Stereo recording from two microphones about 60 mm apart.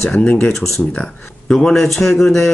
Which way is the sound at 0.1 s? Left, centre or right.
Centre.